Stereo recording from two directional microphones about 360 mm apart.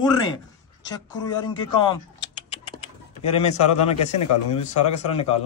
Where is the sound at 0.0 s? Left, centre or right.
Centre.